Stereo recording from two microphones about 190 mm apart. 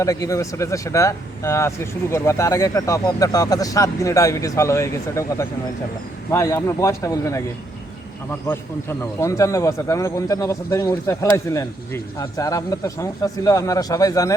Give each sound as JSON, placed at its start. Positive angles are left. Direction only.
{"t": 0.0, "sound": "speech", "side_deg": 15}
{"t": 8.4, "sound": "speech", "side_deg": 15}